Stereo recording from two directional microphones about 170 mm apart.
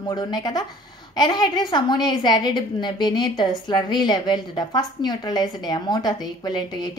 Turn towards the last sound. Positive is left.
turn(degrees=25)  # may be behind; listen again after turning